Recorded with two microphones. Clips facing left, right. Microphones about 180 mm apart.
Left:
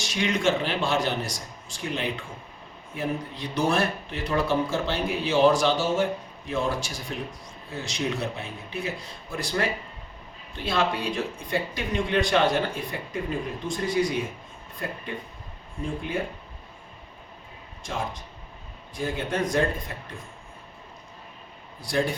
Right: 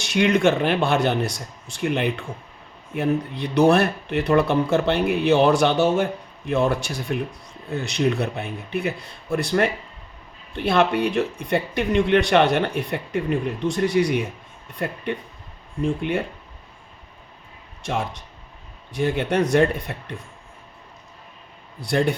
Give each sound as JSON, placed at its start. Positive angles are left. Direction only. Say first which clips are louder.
{"t": 0.0, "sound": "a man's voice", "louder": "right 7 dB", "side_deg": -60}
{"t": 18.9, "sound": "a man's voice", "louder": "right 7 dB", "side_deg": -70}
{"t": 21.8, "sound": "speech", "louder": "right 5 dB", "side_deg": -65}